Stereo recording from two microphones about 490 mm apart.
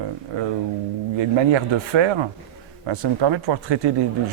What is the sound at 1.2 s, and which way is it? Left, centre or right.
A man's voice, right.